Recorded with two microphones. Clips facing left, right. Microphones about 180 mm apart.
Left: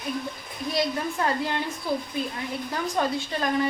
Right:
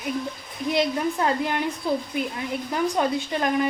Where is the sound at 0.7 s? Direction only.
20° right (ahead or behind).